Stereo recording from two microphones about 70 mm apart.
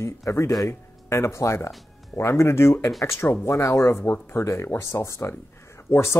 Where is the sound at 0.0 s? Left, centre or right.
Left.